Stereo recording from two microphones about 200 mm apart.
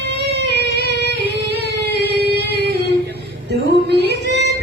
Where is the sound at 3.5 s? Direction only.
55° right (ahead or behind).